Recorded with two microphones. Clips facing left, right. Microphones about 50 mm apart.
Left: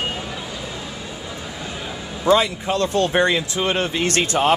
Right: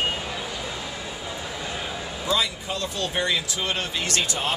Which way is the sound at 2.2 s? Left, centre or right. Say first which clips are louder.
Left 9 dB; left.